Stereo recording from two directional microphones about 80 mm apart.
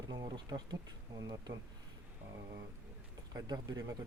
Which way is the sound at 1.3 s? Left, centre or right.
Right.